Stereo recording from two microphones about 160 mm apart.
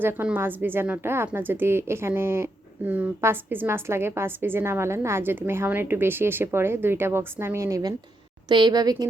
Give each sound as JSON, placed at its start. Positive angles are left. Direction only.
{"t": 0.0, "sound": "a woman's voice", "side_deg": -10}